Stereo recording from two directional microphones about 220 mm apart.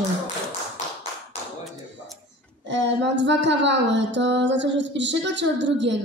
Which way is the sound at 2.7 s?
55° right (ahead or behind).